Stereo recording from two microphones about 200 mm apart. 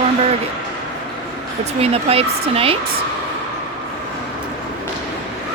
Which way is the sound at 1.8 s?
30° right (ahead or behind).